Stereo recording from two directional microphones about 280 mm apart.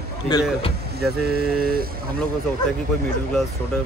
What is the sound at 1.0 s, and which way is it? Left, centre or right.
Speech, right.